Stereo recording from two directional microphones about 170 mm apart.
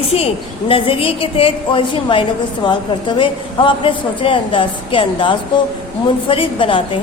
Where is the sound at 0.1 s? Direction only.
35° left (ahead or behind).